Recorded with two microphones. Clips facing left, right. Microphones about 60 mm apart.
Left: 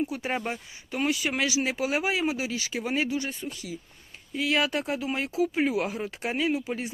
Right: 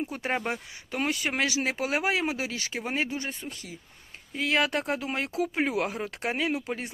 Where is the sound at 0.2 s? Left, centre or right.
Right.